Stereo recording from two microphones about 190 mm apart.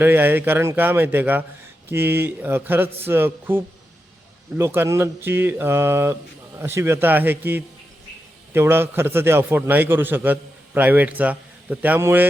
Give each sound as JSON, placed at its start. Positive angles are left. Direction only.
{"t": 0.0, "sound": "a man's voice", "side_deg": -10}